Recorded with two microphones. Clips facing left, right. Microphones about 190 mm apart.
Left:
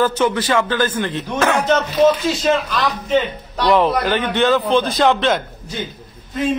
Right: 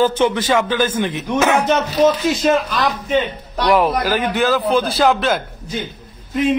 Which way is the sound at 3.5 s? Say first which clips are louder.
Even; 10° right (ahead or behind).